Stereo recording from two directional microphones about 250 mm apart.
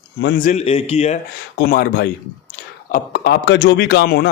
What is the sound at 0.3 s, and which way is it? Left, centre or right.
Speech, left.